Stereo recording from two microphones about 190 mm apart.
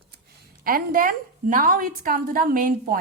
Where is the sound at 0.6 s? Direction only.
50° right (ahead or behind).